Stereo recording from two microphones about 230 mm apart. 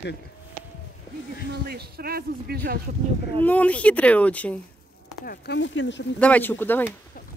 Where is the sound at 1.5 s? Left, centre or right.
Right.